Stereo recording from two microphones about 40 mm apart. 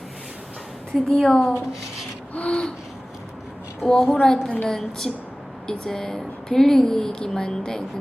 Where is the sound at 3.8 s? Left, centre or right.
Centre.